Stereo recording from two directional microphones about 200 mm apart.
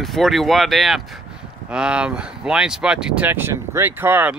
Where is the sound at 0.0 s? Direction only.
Centre (ahead or behind).